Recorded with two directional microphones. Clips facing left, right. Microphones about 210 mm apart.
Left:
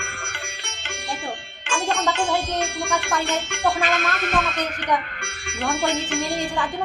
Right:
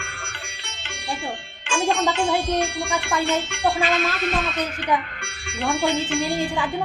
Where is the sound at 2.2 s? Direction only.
45° left (ahead or behind).